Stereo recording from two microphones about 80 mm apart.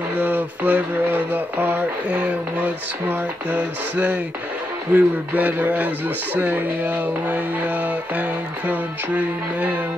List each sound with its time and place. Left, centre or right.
0.2 s synthetic singing: right
2.0 s music: centre
3.1 s synthetic singing: right
8.2 s music: centre